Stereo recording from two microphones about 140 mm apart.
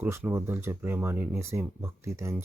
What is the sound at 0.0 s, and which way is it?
Speech, 15° right (ahead or behind).